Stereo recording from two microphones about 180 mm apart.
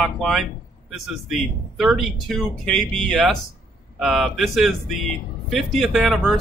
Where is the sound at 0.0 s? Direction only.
Centre (ahead or behind).